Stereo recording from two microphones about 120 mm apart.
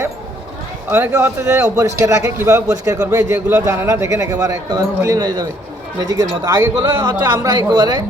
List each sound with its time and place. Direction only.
0.9 s a man's voice: 15° right (ahead or behind); by 8.0 s 35° right (ahead or behind)